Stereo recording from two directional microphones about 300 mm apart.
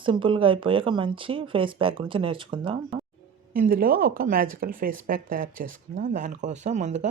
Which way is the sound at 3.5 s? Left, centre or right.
Right.